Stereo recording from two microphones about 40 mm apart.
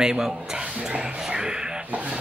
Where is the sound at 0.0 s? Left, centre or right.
Centre.